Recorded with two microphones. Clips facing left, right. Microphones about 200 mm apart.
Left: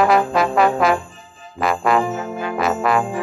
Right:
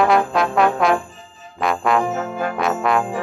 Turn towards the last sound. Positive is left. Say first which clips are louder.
# left 1 dB
turn(degrees=0)  # may be behind; listen again after turning